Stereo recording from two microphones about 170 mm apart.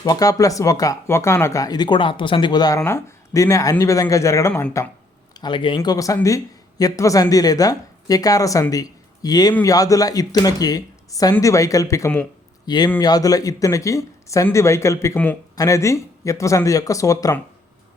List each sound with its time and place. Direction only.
0.0 s speech: 20° left (ahead or behind)
5.3 s speech: 25° left (ahead or behind)